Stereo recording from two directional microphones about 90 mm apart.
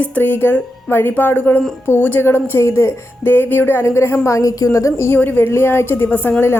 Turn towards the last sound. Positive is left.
turn(degrees=25)  # may be behind; listen again after turning